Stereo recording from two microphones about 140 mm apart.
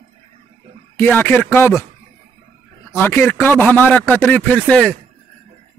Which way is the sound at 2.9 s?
15° left (ahead or behind).